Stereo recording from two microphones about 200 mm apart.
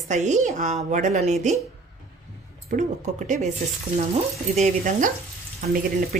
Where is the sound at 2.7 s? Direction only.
45° right (ahead or behind).